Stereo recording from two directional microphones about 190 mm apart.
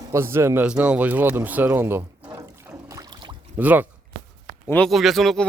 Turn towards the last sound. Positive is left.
turn(degrees=0)  # may be behind; listen again after turning